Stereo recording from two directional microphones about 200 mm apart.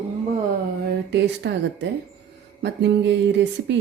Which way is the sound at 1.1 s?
60° right (ahead or behind).